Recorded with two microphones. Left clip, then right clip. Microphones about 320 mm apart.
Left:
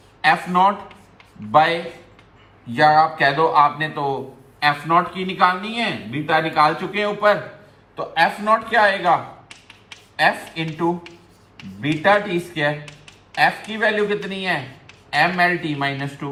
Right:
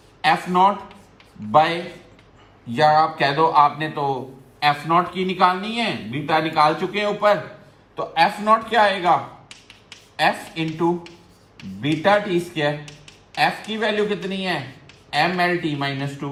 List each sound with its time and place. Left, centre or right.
0.2 s speech: centre
3.0 s speech: centre
16.0 s speech: centre